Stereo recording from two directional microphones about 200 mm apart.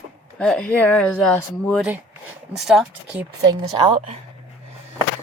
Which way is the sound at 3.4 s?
20° right (ahead or behind).